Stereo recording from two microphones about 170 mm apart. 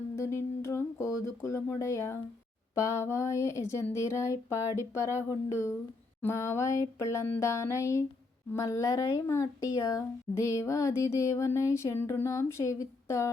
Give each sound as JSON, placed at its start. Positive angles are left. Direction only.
{"t": 0.2, "sound": "humming", "side_deg": 15}
{"t": 2.8, "sound": "speech", "side_deg": 15}